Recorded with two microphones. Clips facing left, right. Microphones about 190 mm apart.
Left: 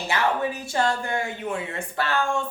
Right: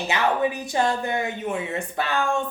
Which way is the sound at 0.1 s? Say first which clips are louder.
Right 2 dB; 15° right (ahead or behind).